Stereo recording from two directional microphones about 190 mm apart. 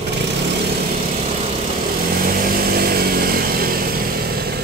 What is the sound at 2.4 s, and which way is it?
Chainsaw, 55° right (ahead or behind).